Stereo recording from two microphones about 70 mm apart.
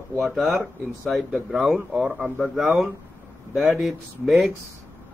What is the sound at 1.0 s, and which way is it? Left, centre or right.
Speech, centre.